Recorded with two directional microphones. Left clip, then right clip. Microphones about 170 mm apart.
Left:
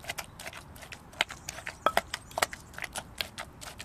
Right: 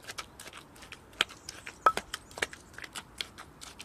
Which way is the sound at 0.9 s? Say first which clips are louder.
Even; 5° left (ahead or behind).